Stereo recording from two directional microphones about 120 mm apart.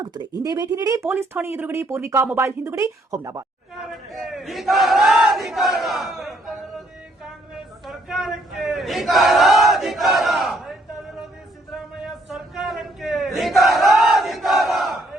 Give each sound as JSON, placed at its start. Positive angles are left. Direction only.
{"t": 0.0, "sound": "speech", "side_deg": -35}
{"t": 3.9, "sound": "battle cry", "side_deg": 0}
{"t": 7.3, "sound": "a sound", "side_deg": -5}